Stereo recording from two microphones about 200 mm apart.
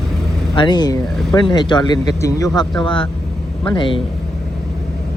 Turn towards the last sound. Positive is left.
turn(degrees=25)  # may be behind; listen again after turning